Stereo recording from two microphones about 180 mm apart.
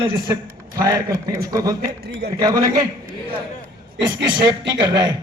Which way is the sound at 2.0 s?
60° right (ahead or behind).